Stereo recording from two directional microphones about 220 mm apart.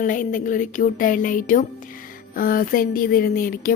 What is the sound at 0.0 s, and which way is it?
Speech, 35° left (ahead or behind).